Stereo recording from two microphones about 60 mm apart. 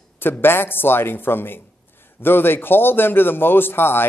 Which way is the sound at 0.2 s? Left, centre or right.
Left.